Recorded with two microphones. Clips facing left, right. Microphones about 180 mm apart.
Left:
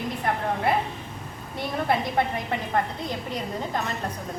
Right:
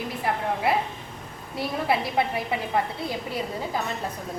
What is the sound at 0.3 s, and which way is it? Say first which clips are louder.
Speech: even; 5° right (ahead or behind).